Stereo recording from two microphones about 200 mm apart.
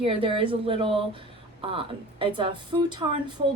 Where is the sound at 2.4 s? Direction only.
25° right (ahead or behind).